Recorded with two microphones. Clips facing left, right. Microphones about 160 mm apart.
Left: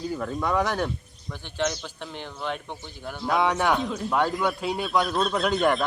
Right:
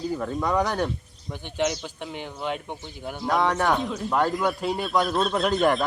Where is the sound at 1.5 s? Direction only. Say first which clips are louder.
Right 2 dB; 15° right (ahead or behind).